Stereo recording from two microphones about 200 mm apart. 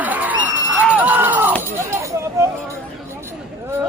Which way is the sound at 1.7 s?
15° right (ahead or behind).